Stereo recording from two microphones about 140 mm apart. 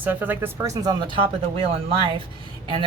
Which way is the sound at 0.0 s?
10° right (ahead or behind).